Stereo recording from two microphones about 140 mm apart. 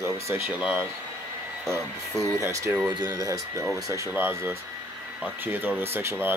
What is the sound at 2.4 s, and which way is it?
Speech, 20° right (ahead or behind).